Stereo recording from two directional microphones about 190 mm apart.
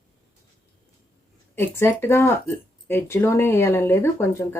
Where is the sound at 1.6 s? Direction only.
10° left (ahead or behind).